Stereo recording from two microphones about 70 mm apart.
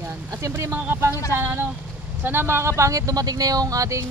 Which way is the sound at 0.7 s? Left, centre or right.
Right.